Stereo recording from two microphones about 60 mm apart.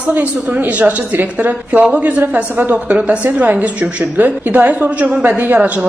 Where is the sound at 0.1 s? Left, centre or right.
Right.